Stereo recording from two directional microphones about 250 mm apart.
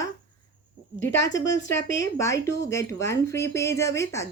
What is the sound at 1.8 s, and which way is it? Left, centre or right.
Speech, left.